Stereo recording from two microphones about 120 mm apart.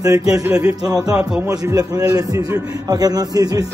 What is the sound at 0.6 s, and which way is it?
A man's voice, 30° right (ahead or behind).